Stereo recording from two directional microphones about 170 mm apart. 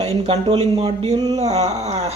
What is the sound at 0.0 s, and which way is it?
Speech, 35° right (ahead or behind).